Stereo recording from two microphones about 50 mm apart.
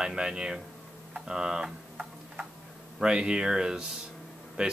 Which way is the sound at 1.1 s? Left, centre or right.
Centre.